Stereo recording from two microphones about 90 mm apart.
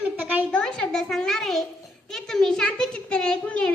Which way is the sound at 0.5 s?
10° left (ahead or behind).